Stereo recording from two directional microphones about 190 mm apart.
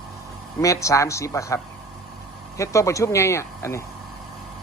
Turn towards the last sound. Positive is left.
turn(degrees=15)  # may be behind; listen again after turning